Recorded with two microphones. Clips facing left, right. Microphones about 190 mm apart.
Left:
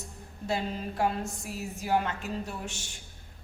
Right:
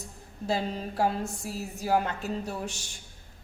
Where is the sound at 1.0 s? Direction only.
35° right (ahead or behind).